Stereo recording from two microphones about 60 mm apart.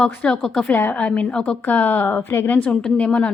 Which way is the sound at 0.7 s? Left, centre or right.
Left.